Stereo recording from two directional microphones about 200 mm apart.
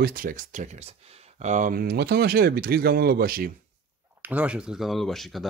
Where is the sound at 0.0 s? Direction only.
45° right (ahead or behind).